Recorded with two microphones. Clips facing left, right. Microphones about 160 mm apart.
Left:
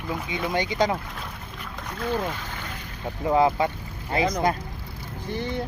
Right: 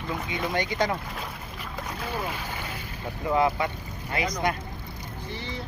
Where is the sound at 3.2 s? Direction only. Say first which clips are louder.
Left 3 dB; 30° left (ahead or behind).